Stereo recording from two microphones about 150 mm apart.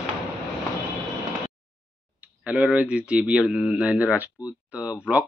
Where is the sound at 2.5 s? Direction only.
10° right (ahead or behind).